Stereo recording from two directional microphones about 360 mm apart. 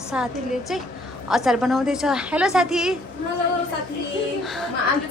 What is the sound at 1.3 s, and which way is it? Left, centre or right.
A woman's voice, centre.